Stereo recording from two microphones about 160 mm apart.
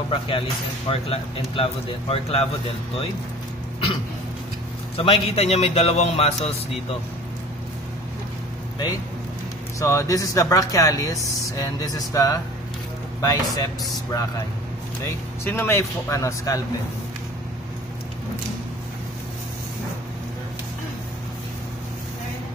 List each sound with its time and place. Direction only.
0.1 s speech: 30° left (ahead or behind)
4.9 s speech: 40° left (ahead or behind)
9.8 s speech: 20° left (ahead or behind)
15.0 s speech: 15° left (ahead or behind)